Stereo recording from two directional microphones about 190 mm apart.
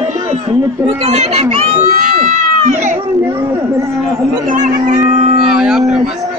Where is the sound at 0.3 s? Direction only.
35° right (ahead or behind).